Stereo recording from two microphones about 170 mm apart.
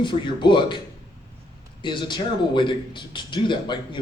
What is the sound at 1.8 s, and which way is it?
A man's voice, 25° left (ahead or behind).